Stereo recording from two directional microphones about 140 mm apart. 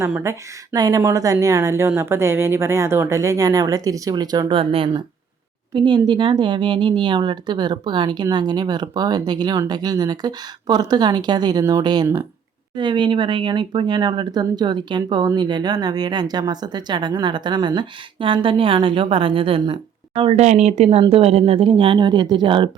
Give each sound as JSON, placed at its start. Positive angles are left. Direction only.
{"t": 0.2, "sound": "speech", "side_deg": -25}
{"t": 4.5, "sound": "speech", "side_deg": -40}